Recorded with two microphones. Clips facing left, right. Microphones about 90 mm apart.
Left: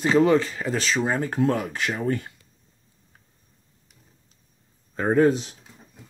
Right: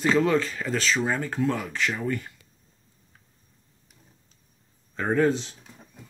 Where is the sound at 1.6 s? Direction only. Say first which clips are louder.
Left 2 dB; 20° left (ahead or behind).